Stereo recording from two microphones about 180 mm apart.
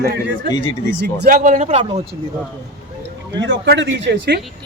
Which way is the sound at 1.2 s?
45° right (ahead or behind).